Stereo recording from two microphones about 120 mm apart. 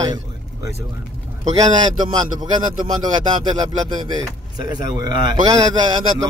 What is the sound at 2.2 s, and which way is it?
A man's voice, 35° right (ahead or behind).